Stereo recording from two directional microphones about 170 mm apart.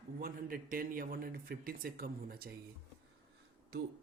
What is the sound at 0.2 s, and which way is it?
A man's voice, 60° right (ahead or behind).